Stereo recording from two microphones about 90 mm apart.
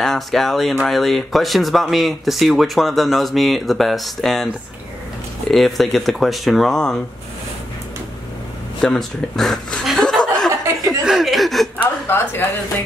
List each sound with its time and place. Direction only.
0.0 s speech: 5° left (ahead or behind)
5.5 s speech: centre (ahead or behind)
8.8 s speech: 5° left (ahead or behind)
9.8 s chuckle: 5° left (ahead or behind)
10.9 s speech: 5° right (ahead or behind)
11.8 s a woman's voice: 25° left (ahead or behind)